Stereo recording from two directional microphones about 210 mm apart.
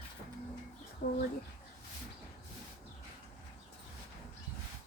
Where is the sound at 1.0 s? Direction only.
45° left (ahead or behind).